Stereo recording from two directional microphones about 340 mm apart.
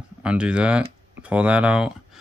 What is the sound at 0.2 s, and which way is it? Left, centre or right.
Speech, centre.